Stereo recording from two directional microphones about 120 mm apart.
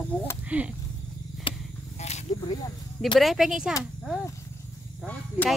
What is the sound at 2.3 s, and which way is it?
Snake, 35° left (ahead or behind).